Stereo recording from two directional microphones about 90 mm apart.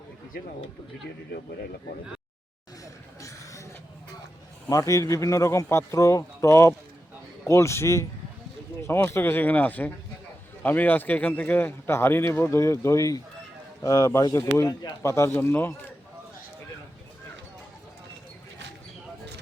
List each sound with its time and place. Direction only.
2.8 s vehicle: 35° left (ahead or behind)
4.7 s a man's voice: 40° left (ahead or behind)
15.0 s a man's voice: 35° left (ahead or behind)